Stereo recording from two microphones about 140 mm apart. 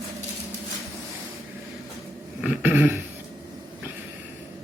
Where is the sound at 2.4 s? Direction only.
10° right (ahead or behind).